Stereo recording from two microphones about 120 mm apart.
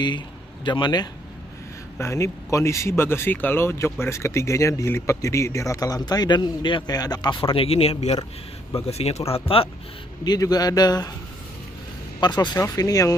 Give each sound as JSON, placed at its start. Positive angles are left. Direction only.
{"t": 0.7, "sound": "speech", "side_deg": 40}
{"t": 2.0, "sound": "speech", "side_deg": 25}
{"t": 10.2, "sound": "speech", "side_deg": 35}
{"t": 12.2, "sound": "speech", "side_deg": 35}